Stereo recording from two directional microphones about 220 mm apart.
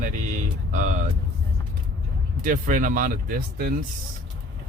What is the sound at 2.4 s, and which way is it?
Speech, 35° right (ahead or behind).